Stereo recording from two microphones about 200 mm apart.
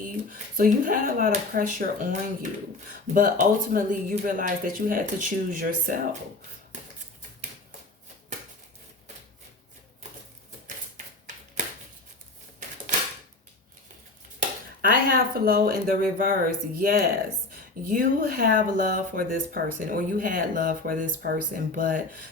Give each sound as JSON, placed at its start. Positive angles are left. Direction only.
{"t": 0.0, "sound": "speech", "side_deg": -45}
{"t": 10.9, "sound": "a sound", "side_deg": -40}
{"t": 14.8, "sound": "speech", "side_deg": -45}